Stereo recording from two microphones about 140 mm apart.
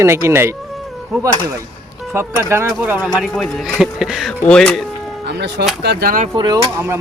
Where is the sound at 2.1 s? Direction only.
20° right (ahead or behind).